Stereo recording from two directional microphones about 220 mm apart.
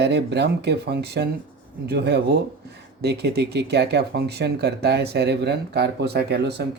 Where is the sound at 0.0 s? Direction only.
50° right (ahead or behind).